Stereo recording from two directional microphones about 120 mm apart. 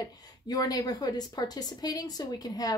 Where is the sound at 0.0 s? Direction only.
35° left (ahead or behind).